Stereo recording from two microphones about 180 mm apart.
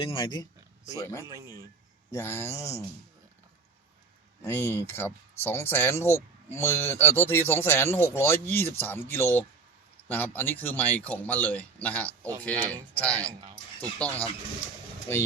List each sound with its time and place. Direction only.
0.0 s speech: 25° left (ahead or behind)
1.2 s speech: 15° right (ahead or behind)
2.1 s speech: 10° left (ahead or behind)
4.4 s speech: 15° left (ahead or behind)